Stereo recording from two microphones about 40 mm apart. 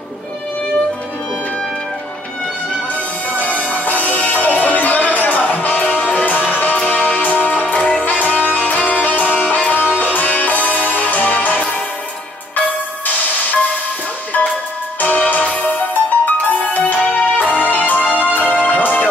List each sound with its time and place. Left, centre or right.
2.9 s music: left
15.0 s music: left